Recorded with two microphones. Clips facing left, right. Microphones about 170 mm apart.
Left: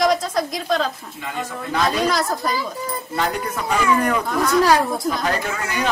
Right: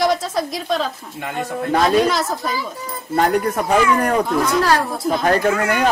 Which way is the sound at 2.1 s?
Centre (ahead or behind).